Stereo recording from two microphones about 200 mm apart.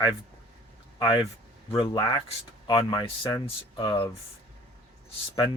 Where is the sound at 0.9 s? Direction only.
15° left (ahead or behind).